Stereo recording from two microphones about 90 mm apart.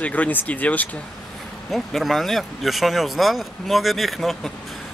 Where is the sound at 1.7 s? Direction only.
Centre (ahead or behind).